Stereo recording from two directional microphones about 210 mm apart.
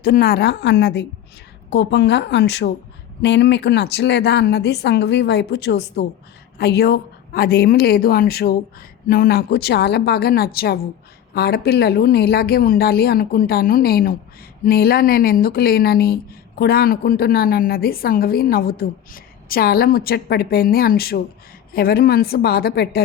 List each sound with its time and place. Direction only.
0.0 s a woman's voice: 45° left (ahead or behind)